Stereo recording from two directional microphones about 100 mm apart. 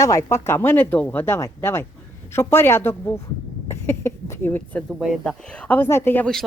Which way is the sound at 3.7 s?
25° left (ahead or behind).